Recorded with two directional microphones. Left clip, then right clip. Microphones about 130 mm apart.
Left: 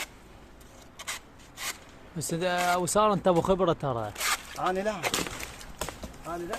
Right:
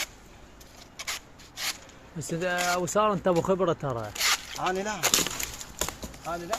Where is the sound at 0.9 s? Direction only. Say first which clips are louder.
Right 3 dB; 15° left (ahead or behind).